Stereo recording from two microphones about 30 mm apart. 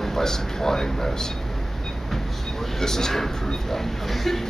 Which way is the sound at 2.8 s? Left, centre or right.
Centre.